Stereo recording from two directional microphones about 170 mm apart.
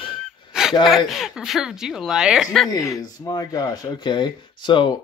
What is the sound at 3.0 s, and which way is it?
Speech, 20° left (ahead or behind).